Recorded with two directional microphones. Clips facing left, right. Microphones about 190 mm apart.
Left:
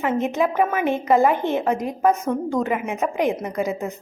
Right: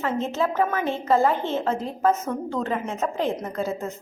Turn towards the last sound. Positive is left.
turn(degrees=15)  # may be behind; listen again after turning